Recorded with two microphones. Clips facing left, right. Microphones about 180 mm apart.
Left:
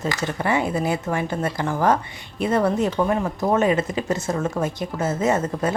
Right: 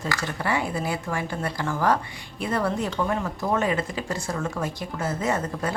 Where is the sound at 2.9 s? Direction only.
35° left (ahead or behind).